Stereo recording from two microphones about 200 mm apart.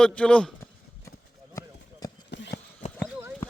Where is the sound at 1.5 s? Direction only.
20° left (ahead or behind).